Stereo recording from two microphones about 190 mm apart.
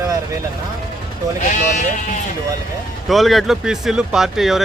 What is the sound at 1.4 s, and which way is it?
Speech, 40° left (ahead or behind).